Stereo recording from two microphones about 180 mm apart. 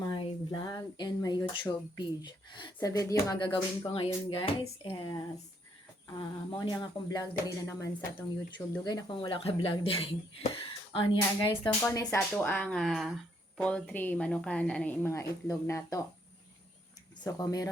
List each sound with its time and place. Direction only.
0.1 s speech: 25° left (ahead or behind)
11.8 s a woman's voice: 15° left (ahead or behind)
17.2 s speech: 20° left (ahead or behind)